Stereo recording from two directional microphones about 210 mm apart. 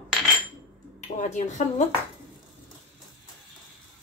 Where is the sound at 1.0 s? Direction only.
35° left (ahead or behind).